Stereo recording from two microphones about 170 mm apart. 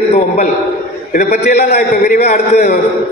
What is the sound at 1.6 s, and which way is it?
Speech, 70° left (ahead or behind).